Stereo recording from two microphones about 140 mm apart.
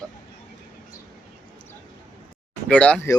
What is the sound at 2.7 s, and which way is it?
Speech, 10° left (ahead or behind).